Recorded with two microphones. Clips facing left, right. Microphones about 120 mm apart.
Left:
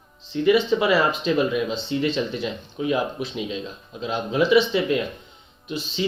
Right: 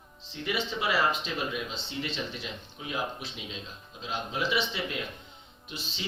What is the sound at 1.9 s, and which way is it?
Speech, 75° left (ahead or behind).